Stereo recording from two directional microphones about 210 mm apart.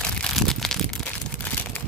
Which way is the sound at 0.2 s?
Centre (ahead or behind).